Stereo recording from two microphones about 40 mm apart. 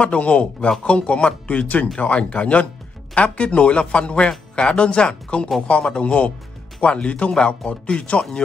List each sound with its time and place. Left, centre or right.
0.0 s speech: left